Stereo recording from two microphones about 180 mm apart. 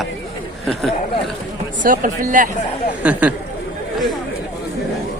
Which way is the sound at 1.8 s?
50° right (ahead or behind).